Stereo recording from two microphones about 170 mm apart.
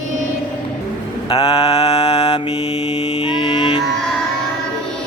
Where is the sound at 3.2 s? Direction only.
30° left (ahead or behind).